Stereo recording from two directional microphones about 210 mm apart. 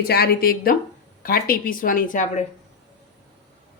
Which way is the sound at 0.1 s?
45° left (ahead or behind).